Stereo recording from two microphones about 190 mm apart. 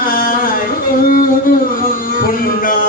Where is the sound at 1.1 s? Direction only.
45° left (ahead or behind).